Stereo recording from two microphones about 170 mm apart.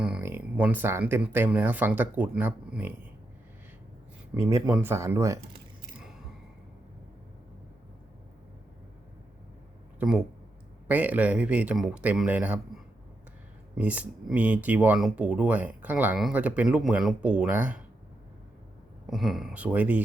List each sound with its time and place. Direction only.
0.0 s speech: 10° right (ahead or behind)
4.4 s speech: 20° right (ahead or behind)
10.0 s speech: 5° right (ahead or behind)
19.0 s speech: centre (ahead or behind)